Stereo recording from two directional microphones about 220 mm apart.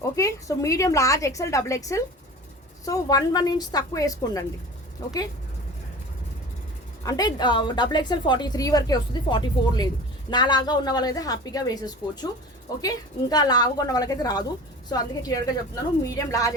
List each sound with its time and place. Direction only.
0.2 s a woman's voice: 15° left (ahead or behind)
7.0 s a woman's voice: 15° left (ahead or behind)
13.3 s a woman's voice: 15° left (ahead or behind)